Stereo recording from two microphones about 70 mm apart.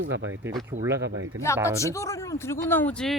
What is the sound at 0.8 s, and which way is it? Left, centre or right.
Speech, right.